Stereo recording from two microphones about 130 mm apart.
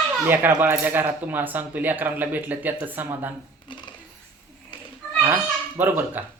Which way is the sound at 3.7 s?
40° left (ahead or behind).